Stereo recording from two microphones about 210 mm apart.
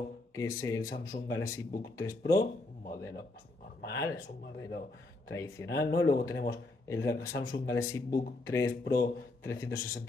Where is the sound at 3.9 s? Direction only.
15° left (ahead or behind).